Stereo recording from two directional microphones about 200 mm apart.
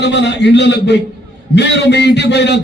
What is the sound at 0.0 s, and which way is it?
A man's voice, 60° left (ahead or behind).